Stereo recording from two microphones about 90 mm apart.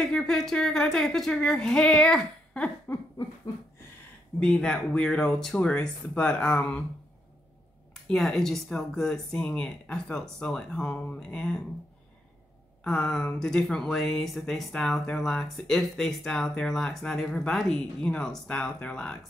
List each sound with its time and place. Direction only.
0.0 s speech: 5° left (ahead or behind)
4.4 s speech: 10° left (ahead or behind)
8.1 s speech: 5° left (ahead or behind)
12.8 s speech: 10° left (ahead or behind)